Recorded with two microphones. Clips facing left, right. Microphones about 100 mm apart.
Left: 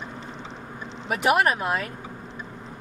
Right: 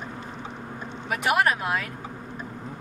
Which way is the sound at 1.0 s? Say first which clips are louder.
Left 2 dB; 30° left (ahead or behind).